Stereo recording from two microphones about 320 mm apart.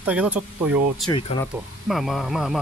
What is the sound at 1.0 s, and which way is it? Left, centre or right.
Speech, centre.